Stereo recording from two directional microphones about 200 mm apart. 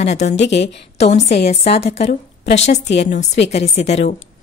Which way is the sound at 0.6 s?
35° left (ahead or behind).